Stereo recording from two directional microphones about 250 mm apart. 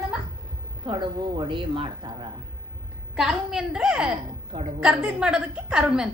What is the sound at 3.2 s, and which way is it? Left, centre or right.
A woman's voice, centre.